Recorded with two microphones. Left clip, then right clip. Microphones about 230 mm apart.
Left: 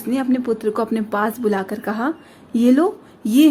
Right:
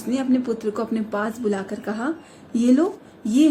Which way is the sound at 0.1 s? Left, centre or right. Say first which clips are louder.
Left 3 dB; left.